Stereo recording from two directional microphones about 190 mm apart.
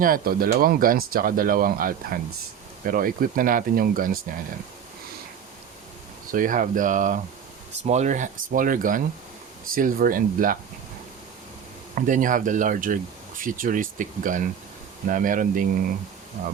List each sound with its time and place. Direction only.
0.0 s speech: 50° right (ahead or behind)
6.3 s speech: 45° right (ahead or behind)
11.9 s speech: 45° right (ahead or behind)